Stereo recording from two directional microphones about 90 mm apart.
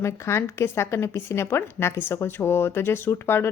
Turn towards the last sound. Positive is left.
turn(degrees=30)  # may be behind; listen again after turning